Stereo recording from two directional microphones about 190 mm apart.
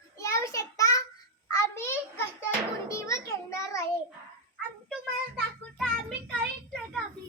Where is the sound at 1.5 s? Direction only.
15° left (ahead or behind).